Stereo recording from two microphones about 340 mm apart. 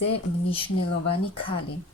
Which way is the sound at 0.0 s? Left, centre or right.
Centre.